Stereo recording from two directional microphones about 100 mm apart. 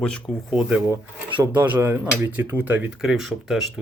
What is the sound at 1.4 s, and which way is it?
Speech, 15° right (ahead or behind).